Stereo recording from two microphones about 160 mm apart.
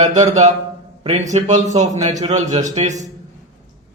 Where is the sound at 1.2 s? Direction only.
50° right (ahead or behind).